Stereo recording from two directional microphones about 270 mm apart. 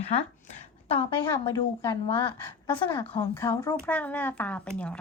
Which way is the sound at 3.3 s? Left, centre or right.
Centre.